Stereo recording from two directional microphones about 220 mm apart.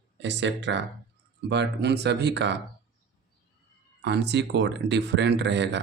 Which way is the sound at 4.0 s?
50° right (ahead or behind).